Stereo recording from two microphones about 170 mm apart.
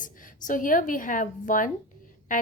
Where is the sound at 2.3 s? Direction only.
50° left (ahead or behind).